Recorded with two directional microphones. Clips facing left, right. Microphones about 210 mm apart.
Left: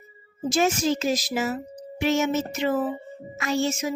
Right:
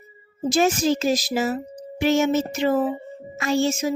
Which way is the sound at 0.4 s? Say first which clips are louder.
Right 3 dB; 35° right (ahead or behind).